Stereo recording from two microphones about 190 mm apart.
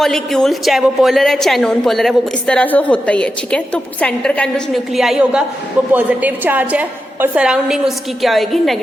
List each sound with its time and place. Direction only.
0.0 s a woman's voice: centre (ahead or behind)